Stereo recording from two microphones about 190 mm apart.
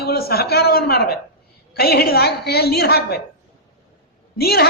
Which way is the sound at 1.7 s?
55° left (ahead or behind).